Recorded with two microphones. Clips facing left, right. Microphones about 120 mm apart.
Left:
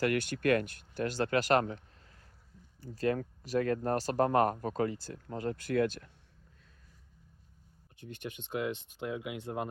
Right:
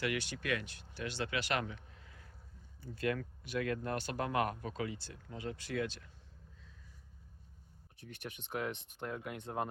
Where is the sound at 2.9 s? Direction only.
35° left (ahead or behind); by 6.1 s 55° left (ahead or behind).